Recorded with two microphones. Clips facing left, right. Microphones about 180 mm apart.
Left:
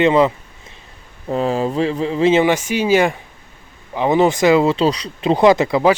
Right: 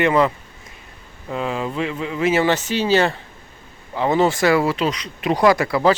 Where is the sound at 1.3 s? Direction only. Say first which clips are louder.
Left 6 dB; 35° left (ahead or behind).